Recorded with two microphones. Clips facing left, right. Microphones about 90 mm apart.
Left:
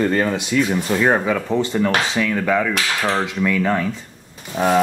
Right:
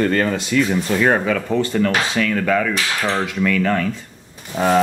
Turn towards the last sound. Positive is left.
turn(degrees=0)  # may be behind; listen again after turning